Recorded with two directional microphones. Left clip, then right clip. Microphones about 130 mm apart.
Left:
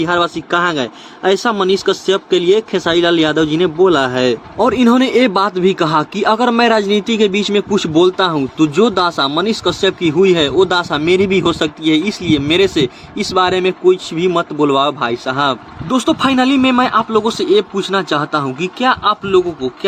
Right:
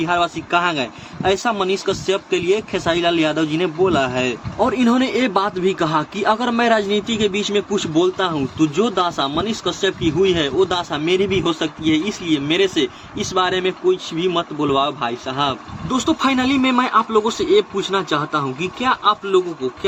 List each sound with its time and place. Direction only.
0.0 s a man's voice: 35° left (ahead or behind); by 19.7 s 60° left (ahead or behind)